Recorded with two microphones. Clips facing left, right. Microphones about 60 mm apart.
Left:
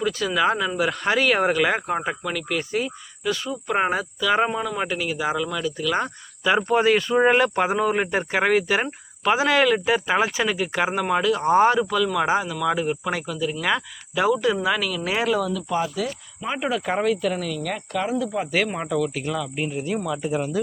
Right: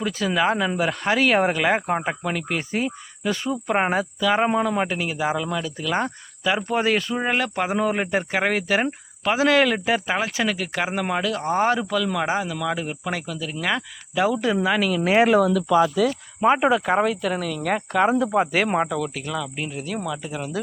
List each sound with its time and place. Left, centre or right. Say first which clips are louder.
0.0 s speech: even; centre
4.4 s speech: right 4 dB; right
6.4 s speech: left 3 dB; centre
15.2 s speech: right 6 dB; right
16.4 s speech: right 11 dB; right
16.8 s speech: right 1 dB; centre
17.6 s speech: right 5 dB; centre
18.2 s speech: right 5 dB; right
18.9 s speech: left 3 dB; centre